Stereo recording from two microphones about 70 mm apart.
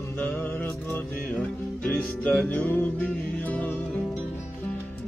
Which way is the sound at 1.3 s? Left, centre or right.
Centre.